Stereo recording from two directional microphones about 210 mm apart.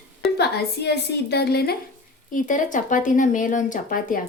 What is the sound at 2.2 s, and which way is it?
Speech, 40° left (ahead or behind).